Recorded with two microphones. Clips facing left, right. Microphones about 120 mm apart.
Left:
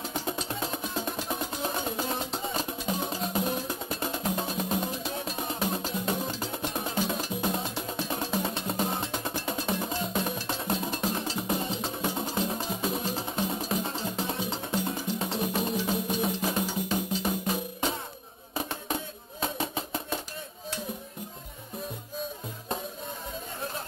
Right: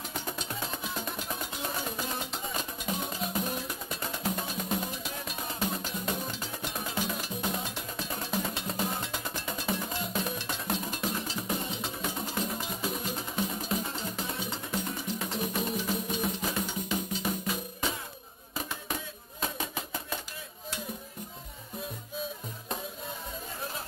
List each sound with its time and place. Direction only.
0.1 s music: 30° left (ahead or behind)
19.4 s music: 30° left (ahead or behind)